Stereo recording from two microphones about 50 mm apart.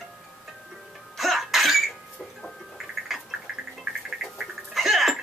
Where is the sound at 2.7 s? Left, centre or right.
Centre.